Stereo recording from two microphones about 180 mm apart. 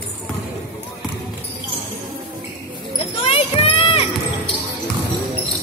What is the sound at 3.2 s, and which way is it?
Child singing, 35° left (ahead or behind).